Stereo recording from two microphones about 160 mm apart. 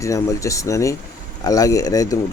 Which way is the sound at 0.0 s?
20° left (ahead or behind).